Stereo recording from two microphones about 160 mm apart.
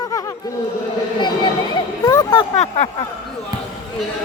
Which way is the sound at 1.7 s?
25° left (ahead or behind).